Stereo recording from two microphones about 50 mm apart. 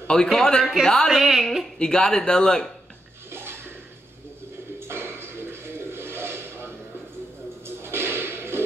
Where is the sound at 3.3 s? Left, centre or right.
Right.